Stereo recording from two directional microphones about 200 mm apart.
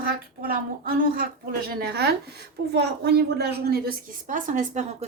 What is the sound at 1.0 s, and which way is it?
A woman's voice, 45° right (ahead or behind).